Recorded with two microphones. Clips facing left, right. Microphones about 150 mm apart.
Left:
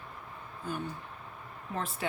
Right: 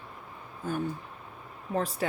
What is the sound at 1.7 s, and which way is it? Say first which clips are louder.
Speech: right 6 dB; 40° right (ahead or behind).